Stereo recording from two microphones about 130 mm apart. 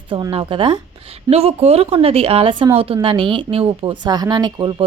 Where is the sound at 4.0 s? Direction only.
35° right (ahead or behind).